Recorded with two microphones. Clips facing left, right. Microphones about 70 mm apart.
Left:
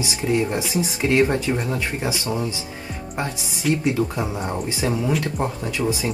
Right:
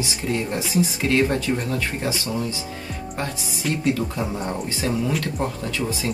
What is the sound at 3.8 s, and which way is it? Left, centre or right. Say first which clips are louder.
Speech: left 1 dB; centre.